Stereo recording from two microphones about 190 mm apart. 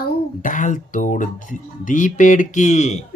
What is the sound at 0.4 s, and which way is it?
Speech, 40° left (ahead or behind).